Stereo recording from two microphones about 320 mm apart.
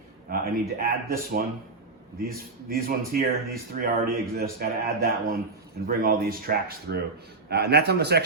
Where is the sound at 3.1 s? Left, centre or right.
Right.